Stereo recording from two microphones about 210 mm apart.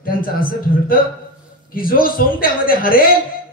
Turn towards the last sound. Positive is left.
turn(degrees=45)  # may be behind; listen again after turning